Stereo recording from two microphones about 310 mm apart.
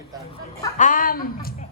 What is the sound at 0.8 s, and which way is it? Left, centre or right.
Speech, left.